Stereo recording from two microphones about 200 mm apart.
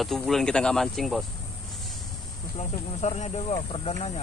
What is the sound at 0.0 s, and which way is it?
Speech, centre (ahead or behind).